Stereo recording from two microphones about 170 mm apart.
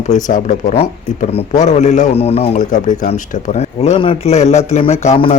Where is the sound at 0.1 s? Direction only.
50° left (ahead or behind).